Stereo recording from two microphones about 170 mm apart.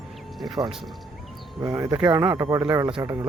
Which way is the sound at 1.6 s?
25° right (ahead or behind).